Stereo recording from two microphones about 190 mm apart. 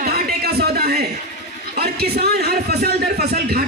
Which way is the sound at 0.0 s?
55° right (ahead or behind).